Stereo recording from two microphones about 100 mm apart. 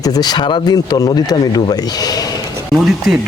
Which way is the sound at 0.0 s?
40° left (ahead or behind).